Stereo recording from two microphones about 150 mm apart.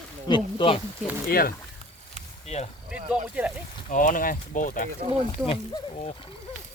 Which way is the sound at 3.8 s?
60° left (ahead or behind).